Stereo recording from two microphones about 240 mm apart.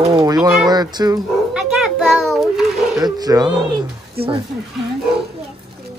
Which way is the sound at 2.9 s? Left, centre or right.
Centre.